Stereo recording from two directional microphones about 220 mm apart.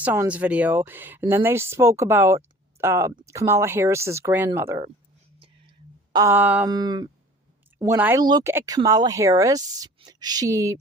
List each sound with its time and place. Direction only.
0.0 s speech: 10° right (ahead or behind)
6.1 s speech: 10° right (ahead or behind)
6.7 s speech: 20° right (ahead or behind)